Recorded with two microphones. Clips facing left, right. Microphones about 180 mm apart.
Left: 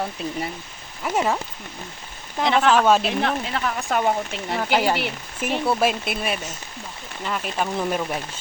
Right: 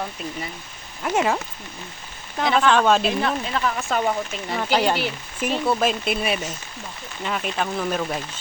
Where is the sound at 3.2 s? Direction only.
65° left (ahead or behind).